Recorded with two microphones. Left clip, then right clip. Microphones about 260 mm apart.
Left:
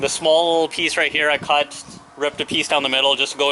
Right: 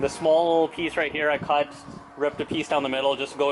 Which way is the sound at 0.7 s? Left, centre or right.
Centre.